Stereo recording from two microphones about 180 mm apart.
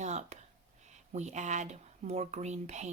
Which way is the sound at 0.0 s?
40° right (ahead or behind).